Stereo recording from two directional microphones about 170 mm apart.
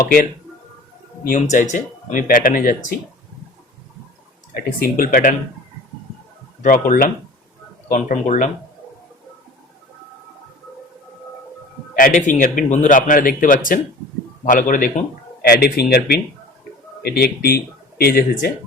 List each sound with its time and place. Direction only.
0.0 s speech: 60° left (ahead or behind)
1.2 s speech: 50° left (ahead or behind)
4.5 s speech: 55° left (ahead or behind)
6.6 s speech: 55° left (ahead or behind)
11.9 s speech: 50° left (ahead or behind)